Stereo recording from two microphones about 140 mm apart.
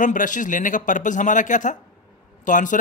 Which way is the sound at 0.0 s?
65° left (ahead or behind).